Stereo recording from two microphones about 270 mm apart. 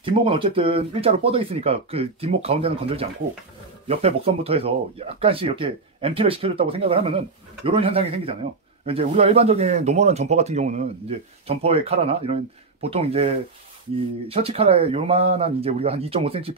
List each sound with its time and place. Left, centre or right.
0.0 s speech: centre